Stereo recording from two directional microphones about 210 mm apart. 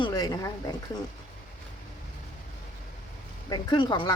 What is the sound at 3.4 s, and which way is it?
Speech, 20° left (ahead or behind).